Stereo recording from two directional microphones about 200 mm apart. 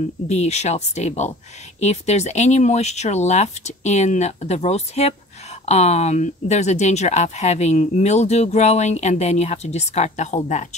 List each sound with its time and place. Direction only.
0.3 s speech: 35° left (ahead or behind)